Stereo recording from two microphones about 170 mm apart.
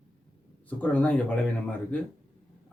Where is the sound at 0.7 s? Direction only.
10° left (ahead or behind).